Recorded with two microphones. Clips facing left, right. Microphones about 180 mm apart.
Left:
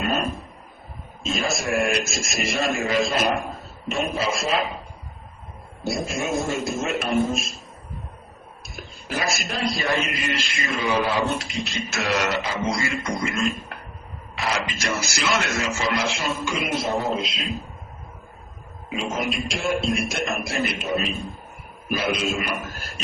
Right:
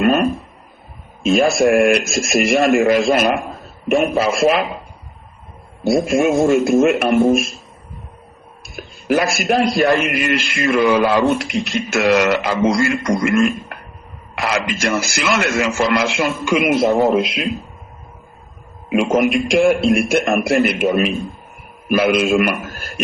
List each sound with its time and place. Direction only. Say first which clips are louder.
0.0 s a sound: right 10 dB; 70° right (ahead or behind)
1.2 s a man's voice: right 12 dB; 60° right (ahead or behind)
5.8 s a man's voice: right 12 dB; 55° right (ahead or behind)
8.7 s a man's voice: right 13 dB; 60° right (ahead or behind)
18.9 s a man's voice: right 12 dB; 70° right (ahead or behind)